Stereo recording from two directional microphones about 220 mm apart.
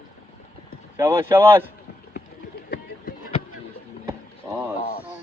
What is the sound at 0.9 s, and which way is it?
Speech, 10° right (ahead or behind).